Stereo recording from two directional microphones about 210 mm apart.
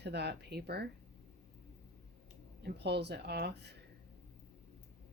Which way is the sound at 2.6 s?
50° right (ahead or behind).